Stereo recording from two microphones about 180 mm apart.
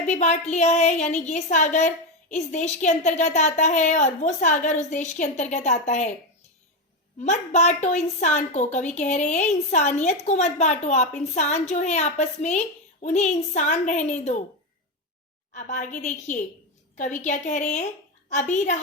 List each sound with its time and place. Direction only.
0.1 s a woman's voice: 40° left (ahead or behind)
7.3 s a woman's voice: 40° left (ahead or behind)
15.5 s a woman's voice: 45° left (ahead or behind)